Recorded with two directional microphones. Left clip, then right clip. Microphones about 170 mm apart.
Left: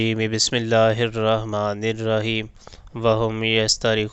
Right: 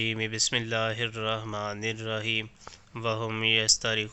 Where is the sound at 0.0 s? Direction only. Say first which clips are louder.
Left 7 dB; 55° left (ahead or behind).